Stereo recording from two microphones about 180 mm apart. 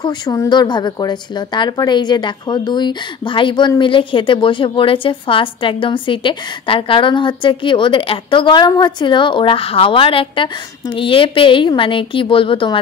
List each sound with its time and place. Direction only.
0.0 s speech: 20° left (ahead or behind)